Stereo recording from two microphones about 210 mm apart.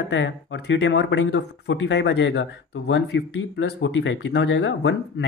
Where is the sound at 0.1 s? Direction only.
55° left (ahead or behind).